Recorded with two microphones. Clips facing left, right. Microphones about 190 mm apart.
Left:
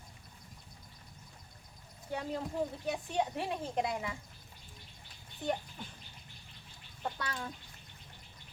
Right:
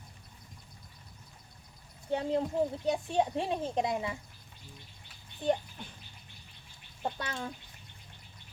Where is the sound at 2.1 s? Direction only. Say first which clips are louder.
Right 7 dB; 25° right (ahead or behind).